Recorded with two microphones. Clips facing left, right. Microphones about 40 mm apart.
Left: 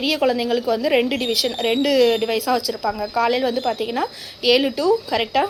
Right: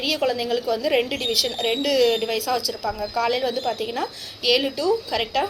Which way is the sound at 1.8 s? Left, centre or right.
Centre.